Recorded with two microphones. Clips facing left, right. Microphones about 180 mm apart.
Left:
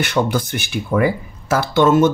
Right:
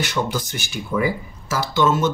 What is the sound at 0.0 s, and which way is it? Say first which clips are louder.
Speech: left 5 dB; 60° left (ahead or behind).